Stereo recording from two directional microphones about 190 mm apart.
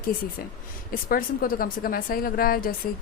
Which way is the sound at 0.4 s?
50° left (ahead or behind).